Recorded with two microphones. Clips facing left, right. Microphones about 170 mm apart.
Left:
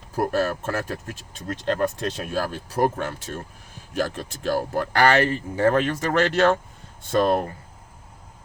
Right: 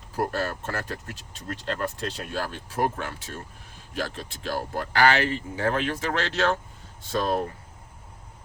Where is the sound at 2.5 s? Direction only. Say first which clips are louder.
Left 4 dB; 40° left (ahead or behind).